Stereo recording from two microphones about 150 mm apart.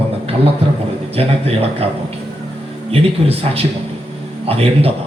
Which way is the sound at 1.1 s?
40° right (ahead or behind).